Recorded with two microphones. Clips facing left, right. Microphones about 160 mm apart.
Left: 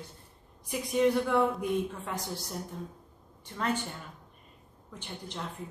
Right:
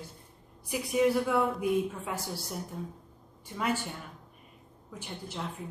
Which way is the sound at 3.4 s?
10° right (ahead or behind).